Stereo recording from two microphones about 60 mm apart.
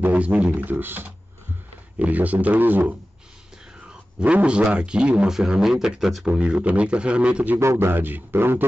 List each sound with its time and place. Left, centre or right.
0.0 s a man's voice: right
4.2 s a man's voice: right; by 6.2 s centre
6.2 s a man's voice: centre
7.6 s a man's voice: right